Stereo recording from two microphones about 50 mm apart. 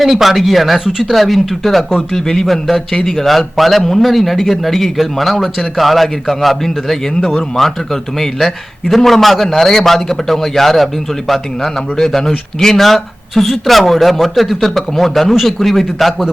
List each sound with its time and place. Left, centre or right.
0.0 s a man's voice: centre